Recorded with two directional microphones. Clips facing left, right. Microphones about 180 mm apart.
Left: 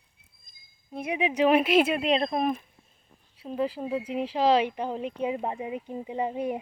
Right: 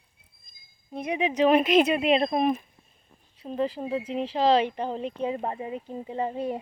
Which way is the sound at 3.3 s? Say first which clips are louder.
Right 1 dB; 5° left (ahead or behind).